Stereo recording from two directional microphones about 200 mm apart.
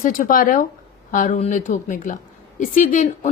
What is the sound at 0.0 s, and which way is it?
A woman's voice, 45° left (ahead or behind).